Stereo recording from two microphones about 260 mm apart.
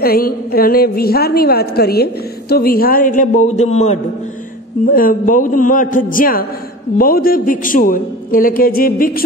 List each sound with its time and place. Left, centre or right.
0.0 s a man's voice: left